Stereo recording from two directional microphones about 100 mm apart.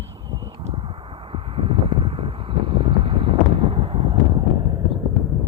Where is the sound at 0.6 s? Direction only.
65° right (ahead or behind).